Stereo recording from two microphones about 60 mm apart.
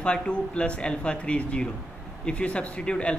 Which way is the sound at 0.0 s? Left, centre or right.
Centre.